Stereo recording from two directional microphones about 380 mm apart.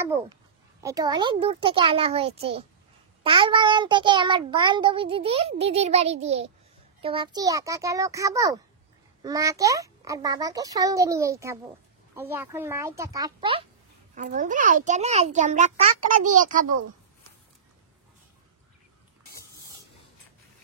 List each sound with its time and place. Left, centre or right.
0.7 s a child's voice: centre